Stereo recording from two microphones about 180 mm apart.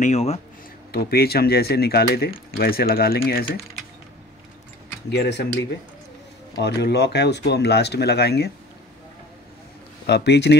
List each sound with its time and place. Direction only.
0.0 s speech: 35° left (ahead or behind)
0.9 s speech: 60° left (ahead or behind)
5.1 s speech: 70° left (ahead or behind)
6.6 s speech: 70° left (ahead or behind)
10.0 s speech: 70° left (ahead or behind)